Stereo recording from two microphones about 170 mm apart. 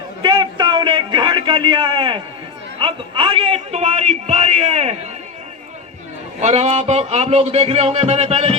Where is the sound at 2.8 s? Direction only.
30° right (ahead or behind).